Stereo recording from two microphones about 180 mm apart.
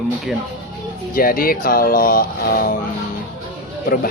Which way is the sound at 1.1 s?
55° left (ahead or behind).